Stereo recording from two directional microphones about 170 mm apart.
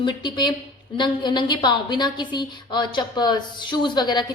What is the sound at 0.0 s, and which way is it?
A woman's voice, 25° left (ahead or behind).